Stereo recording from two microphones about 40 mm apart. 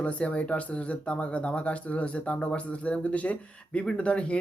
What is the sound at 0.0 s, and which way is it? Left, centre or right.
Speech, left.